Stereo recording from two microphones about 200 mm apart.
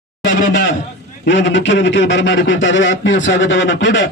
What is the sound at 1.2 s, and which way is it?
A man's voice, 65° left (ahead or behind).